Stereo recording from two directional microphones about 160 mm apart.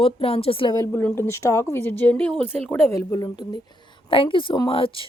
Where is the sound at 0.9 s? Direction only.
15° left (ahead or behind).